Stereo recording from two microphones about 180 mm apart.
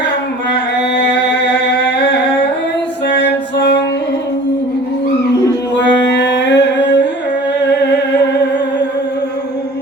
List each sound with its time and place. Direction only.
0.8 s singing: 75° left (ahead or behind)
3.1 s music: 70° left (ahead or behind)
5.7 s music: 75° left (ahead or behind)